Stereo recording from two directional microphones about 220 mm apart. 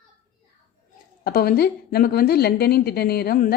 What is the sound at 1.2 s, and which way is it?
A woman's voice, 45° left (ahead or behind).